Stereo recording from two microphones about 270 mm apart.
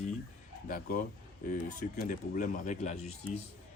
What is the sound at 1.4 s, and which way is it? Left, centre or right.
Speech, left.